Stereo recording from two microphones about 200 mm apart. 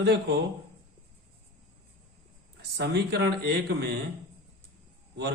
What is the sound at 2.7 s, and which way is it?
Speech, 55° right (ahead or behind).